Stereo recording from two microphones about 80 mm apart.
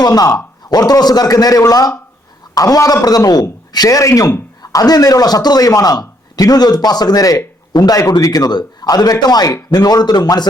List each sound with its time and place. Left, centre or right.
0.0 s a man's voice: left